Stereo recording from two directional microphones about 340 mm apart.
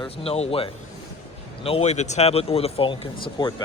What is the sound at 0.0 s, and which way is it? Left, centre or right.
Speech, centre.